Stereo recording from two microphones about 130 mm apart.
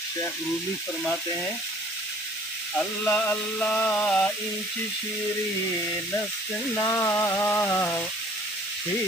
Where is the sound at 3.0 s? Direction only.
15° left (ahead or behind).